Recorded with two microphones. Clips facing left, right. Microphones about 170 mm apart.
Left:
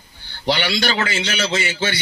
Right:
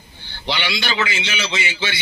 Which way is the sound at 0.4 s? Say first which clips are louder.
Left 4 dB; 45° left (ahead or behind).